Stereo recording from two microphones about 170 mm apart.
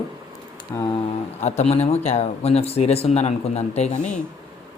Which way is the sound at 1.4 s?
40° left (ahead or behind).